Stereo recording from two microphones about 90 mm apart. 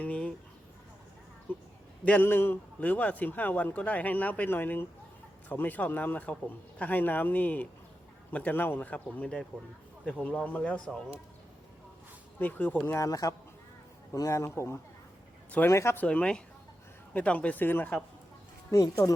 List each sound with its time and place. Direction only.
0.0 s a sound: 15° left (ahead or behind)
1.5 s a sound: 20° left (ahead or behind)
2.0 s a man's voice: 20° left (ahead or behind)
12.4 s a man's voice: 20° left (ahead or behind)
12.9 s a man's voice: 40° left (ahead or behind)
16.0 s speech: 15° left (ahead or behind)
18.7 s a man's voice: 40° left (ahead or behind)